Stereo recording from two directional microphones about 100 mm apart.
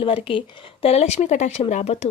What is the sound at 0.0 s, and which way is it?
Speech, 60° left (ahead or behind).